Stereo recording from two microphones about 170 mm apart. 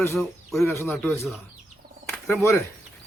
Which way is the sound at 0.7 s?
10° left (ahead or behind).